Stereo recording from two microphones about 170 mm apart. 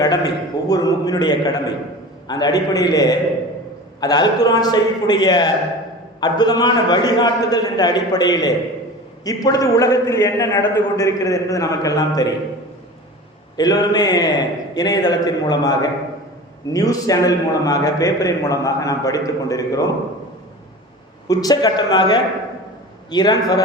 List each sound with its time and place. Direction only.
0.0 s a man's voice: 20° left (ahead or behind)
13.6 s a man's voice: 25° left (ahead or behind)
21.2 s a man's voice: 25° left (ahead or behind)